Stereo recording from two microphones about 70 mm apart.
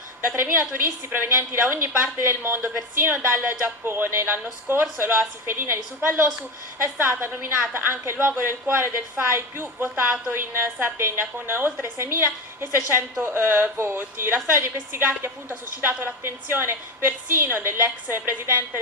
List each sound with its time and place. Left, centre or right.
0.3 s a woman's voice: right